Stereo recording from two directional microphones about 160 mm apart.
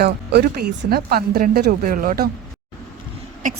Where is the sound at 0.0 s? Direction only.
85° right; by 2.3 s 65° right (ahead or behind).